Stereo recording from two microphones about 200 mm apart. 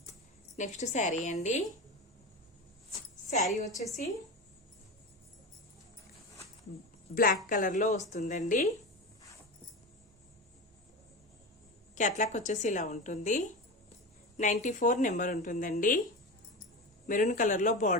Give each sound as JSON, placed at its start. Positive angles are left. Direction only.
{"t": 0.5, "sound": "speech", "side_deg": 35}
{"t": 7.1, "sound": "a woman's voice", "side_deg": 45}
{"t": 11.9, "sound": "speech", "side_deg": 40}
{"t": 17.1, "sound": "speech", "side_deg": 40}